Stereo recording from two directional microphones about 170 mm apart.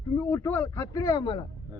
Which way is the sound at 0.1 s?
15° left (ahead or behind).